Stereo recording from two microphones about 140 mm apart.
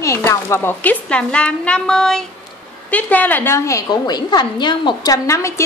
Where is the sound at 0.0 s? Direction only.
20° left (ahead or behind).